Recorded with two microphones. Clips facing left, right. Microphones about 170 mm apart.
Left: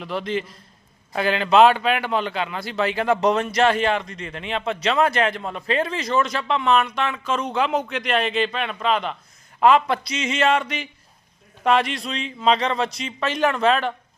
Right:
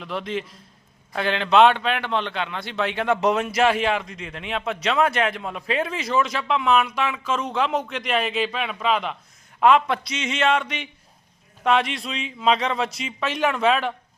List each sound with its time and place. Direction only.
0.0 s a man's voice: centre (ahead or behind)